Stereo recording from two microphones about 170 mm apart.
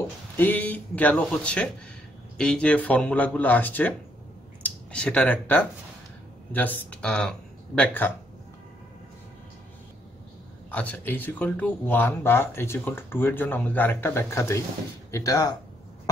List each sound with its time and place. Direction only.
0.4 s speech: 10° left (ahead or behind)
10.7 s speech: 10° left (ahead or behind)